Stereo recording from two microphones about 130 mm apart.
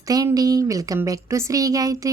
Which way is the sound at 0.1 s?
30° right (ahead or behind).